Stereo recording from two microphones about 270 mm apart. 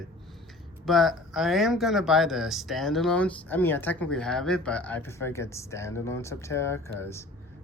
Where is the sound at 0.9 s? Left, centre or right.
Centre.